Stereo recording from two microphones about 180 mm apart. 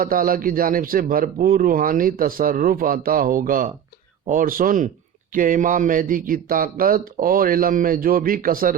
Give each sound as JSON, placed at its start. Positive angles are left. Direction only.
{"t": 0.0, "sound": "speech", "side_deg": -50}